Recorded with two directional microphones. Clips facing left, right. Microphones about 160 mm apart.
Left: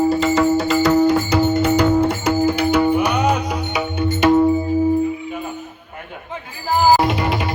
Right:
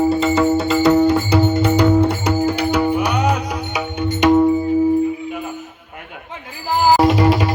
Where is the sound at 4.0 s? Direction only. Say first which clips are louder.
Right 1 dB; 15° right (ahead or behind).